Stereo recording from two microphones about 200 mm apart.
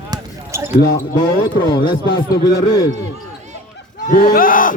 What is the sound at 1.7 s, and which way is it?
Speech, 20° left (ahead or behind).